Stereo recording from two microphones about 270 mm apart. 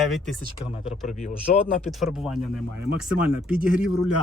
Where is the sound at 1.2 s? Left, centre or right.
Left.